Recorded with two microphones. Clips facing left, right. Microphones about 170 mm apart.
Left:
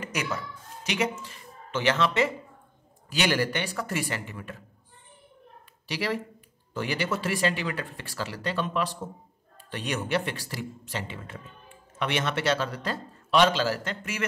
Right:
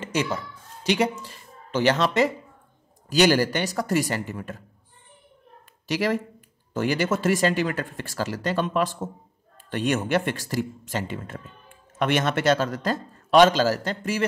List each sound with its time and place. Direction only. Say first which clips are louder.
0.0 s speech: right 5 dB; 30° right (ahead or behind)
5.9 s speech: right 6 dB; 45° right (ahead or behind)